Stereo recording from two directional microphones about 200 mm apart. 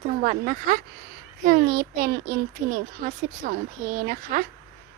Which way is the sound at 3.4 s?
45° right (ahead or behind).